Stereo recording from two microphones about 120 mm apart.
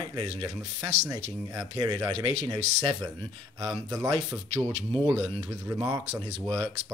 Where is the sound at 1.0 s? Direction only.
30° right (ahead or behind).